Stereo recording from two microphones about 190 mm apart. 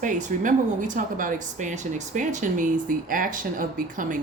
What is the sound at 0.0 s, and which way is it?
A woman's voice, 40° right (ahead or behind).